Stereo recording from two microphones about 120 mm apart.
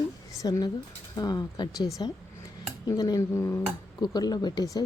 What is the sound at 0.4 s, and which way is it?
Speech, 30° left (ahead or behind).